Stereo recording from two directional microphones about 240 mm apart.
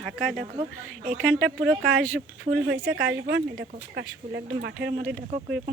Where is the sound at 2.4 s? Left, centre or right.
Right.